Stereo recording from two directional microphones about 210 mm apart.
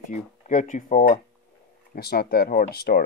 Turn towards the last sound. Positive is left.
turn(degrees=50)  # may be behind; listen again after turning